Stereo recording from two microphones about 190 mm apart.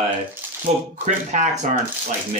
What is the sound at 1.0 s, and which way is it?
Speech, 40° right (ahead or behind).